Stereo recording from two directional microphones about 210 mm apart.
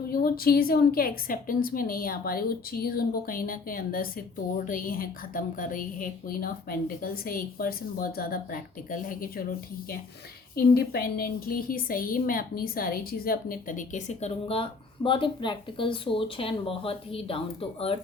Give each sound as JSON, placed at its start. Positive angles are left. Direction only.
{"t": 0.1, "sound": "a woman's voice", "side_deg": 45}
{"t": 10.5, "sound": "a woman's voice", "side_deg": 45}